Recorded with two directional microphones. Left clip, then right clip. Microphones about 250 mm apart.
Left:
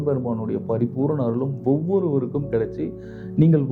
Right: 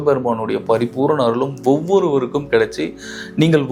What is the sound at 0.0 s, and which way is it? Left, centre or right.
Speech, centre.